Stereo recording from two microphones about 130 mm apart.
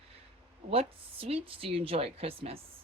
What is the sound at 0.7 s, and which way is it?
Speech, 45° right (ahead or behind).